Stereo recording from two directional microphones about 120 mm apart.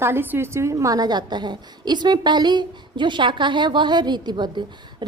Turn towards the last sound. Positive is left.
turn(degrees=-40)  # may be behind; listen again after turning